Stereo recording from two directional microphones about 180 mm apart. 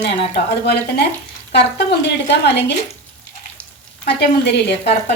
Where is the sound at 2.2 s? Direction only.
70° left (ahead or behind).